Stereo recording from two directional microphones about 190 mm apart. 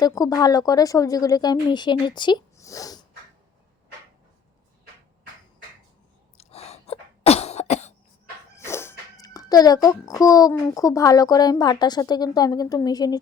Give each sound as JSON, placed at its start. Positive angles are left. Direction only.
{"t": 0.0, "sound": "speech", "side_deg": 20}
{"t": 6.3, "sound": "cough", "side_deg": 35}
{"t": 8.5, "sound": "a sound", "side_deg": 15}
{"t": 10.1, "sound": "speech", "side_deg": 20}